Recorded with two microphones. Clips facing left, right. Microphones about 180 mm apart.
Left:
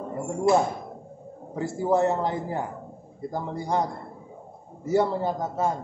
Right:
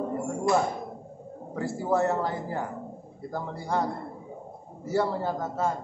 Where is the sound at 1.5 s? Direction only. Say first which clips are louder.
Left 3 dB; 20° left (ahead or behind).